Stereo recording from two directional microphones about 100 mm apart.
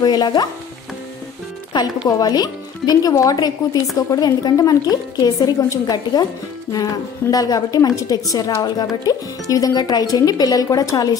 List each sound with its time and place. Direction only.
0.0 s speech: 45° left (ahead or behind)
2.0 s a woman's voice: 40° left (ahead or behind)